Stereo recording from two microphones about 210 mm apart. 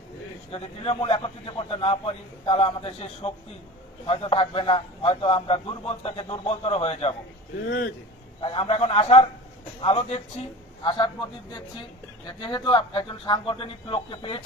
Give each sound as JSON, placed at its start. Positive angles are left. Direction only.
{"t": 0.5, "sound": "a man's voice", "side_deg": 25}
{"t": 8.4, "sound": "a man's voice", "side_deg": 25}